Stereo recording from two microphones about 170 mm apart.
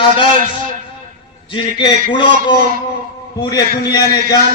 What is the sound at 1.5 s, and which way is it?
Speech, 30° left (ahead or behind).